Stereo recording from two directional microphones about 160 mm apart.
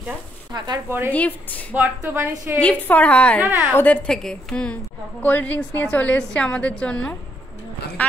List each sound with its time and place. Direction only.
0.5 s speech: 25° right (ahead or behind)
1.1 s a woman's voice: 10° left (ahead or behind)
1.7 s a woman's voice: 10° right (ahead or behind)
2.6 s a woman's voice: 10° left (ahead or behind)